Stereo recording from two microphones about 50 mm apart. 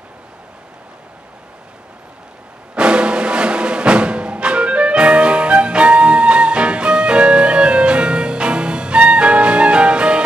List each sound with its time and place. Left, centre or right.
2.7 s music: right